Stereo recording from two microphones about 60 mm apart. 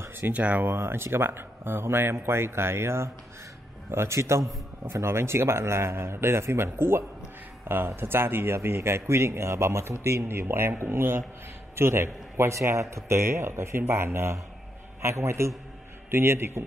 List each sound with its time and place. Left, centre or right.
0.3 s speech: right
0.7 s a man's voice: right